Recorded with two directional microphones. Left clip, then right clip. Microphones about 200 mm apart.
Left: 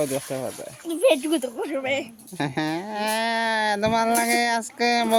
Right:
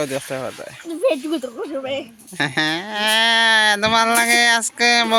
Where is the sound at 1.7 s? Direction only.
15° left (ahead or behind).